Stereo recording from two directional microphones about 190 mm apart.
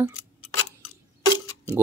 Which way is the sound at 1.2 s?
20° left (ahead or behind).